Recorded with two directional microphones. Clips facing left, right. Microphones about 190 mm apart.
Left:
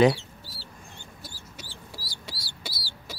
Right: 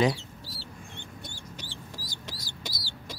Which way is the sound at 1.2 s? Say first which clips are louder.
Right 2 dB; 5° left (ahead or behind).